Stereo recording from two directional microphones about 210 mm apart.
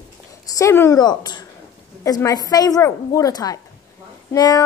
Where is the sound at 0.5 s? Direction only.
15° left (ahead or behind).